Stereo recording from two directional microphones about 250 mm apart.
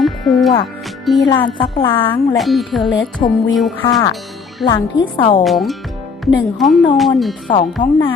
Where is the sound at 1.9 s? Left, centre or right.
Centre.